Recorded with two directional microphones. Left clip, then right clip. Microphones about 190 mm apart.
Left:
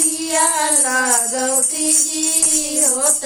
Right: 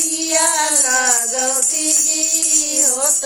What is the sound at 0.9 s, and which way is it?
Music, 20° right (ahead or behind).